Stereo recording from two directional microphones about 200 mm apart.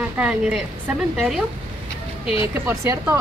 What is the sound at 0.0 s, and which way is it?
A woman's voice, 5° right (ahead or behind).